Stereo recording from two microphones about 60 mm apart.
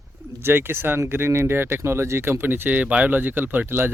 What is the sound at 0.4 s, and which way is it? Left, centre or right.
Speech, right.